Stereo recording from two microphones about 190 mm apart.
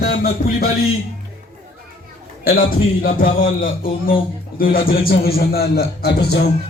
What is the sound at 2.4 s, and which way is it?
A man's voice, 50° left (ahead or behind).